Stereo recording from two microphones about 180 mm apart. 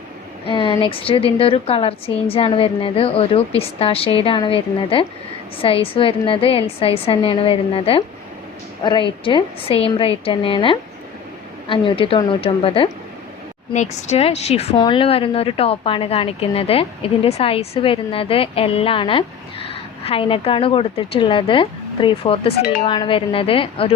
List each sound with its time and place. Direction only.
0.4 s a woman's voice: 30° left (ahead or behind)